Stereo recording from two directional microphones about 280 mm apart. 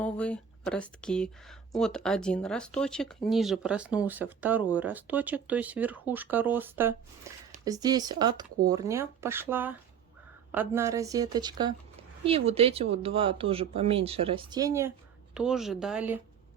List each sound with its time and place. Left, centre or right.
0.0 s speech: centre